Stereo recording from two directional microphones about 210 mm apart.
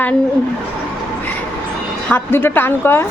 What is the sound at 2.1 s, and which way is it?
Speech, 10° left (ahead or behind).